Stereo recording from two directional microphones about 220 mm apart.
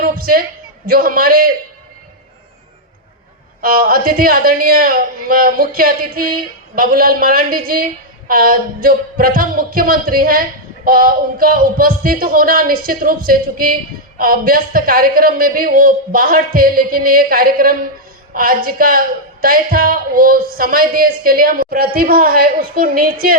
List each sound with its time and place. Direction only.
0.0 s a sound: 40° right (ahead or behind)
0.9 s a woman's voice: 40° right (ahead or behind)
3.6 s a woman's voice: 40° right (ahead or behind)